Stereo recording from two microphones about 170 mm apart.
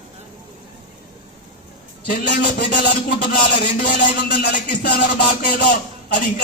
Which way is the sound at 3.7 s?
50° left (ahead or behind).